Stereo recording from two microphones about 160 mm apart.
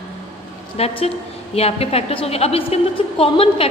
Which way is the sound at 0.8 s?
40° left (ahead or behind).